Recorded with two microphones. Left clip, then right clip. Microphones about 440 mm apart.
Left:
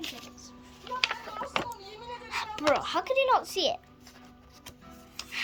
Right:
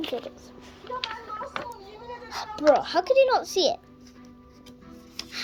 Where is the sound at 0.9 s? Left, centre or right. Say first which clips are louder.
Right 2 dB; centre.